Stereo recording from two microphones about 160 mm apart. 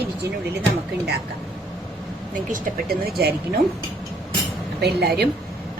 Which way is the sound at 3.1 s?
80° right.